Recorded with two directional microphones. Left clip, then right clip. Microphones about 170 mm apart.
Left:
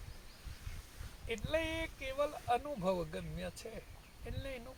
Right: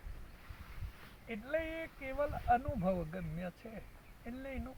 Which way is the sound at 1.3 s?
20° left (ahead or behind).